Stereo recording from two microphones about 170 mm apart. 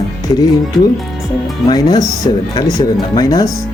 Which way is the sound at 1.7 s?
25° left (ahead or behind).